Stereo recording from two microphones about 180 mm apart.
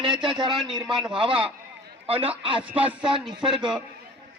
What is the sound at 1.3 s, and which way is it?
Speech, 5° right (ahead or behind).